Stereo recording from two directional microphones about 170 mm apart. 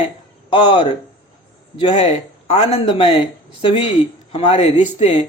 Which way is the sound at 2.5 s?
40° left (ahead or behind).